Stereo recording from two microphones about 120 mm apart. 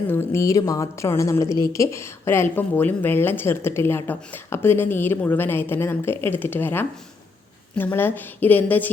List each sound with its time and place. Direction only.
0.1 s a woman's voice: 20° left (ahead or behind)